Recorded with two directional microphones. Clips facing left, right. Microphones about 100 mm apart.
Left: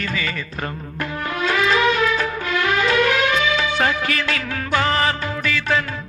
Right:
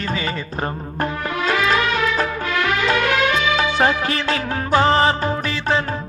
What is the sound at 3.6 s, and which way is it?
Music, 30° right (ahead or behind).